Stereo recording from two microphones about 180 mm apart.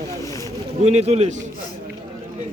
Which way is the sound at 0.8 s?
35° right (ahead or behind).